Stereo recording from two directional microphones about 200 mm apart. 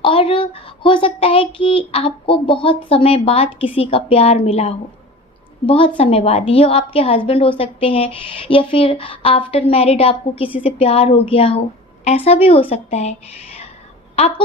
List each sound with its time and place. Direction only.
0.0 s a woman's voice: 25° left (ahead or behind)